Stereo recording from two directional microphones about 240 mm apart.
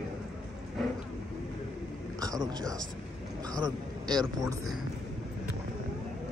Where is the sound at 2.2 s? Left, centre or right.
Centre.